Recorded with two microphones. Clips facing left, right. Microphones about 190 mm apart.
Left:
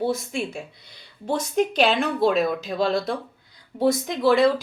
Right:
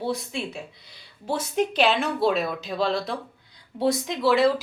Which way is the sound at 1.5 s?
45° left (ahead or behind).